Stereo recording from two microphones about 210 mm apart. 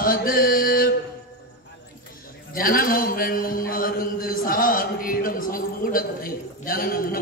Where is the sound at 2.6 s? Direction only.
40° left (ahead or behind).